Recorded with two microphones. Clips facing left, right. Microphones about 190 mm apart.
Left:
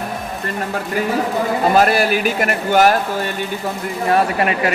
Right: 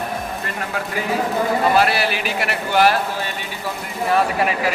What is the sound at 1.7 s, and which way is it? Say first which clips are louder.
A man's voice: left 4 dB; 45° left (ahead or behind).